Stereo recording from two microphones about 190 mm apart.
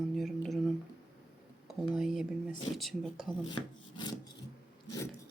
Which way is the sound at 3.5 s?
25° left (ahead or behind).